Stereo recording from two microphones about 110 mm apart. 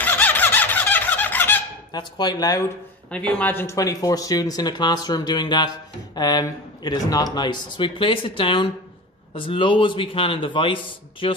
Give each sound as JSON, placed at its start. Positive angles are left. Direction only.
{"t": 0.0, "sound": "a sound", "side_deg": 15}
{"t": 1.9, "sound": "speech", "side_deg": 40}
{"t": 3.1, "sound": "a man's voice", "side_deg": 10}